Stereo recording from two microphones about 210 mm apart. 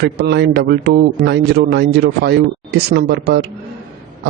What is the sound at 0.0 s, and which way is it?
A man's voice, 50° right (ahead or behind).